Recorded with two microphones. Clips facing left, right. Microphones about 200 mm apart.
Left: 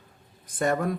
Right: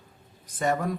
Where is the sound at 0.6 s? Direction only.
50° left (ahead or behind).